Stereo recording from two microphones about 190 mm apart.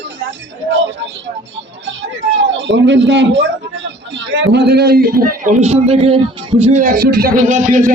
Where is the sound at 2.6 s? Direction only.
70° right (ahead or behind).